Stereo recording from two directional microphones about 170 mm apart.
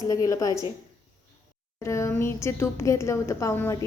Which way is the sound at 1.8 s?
15° left (ahead or behind).